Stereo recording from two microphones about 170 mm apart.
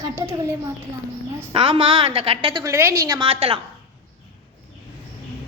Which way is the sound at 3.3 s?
30° right (ahead or behind).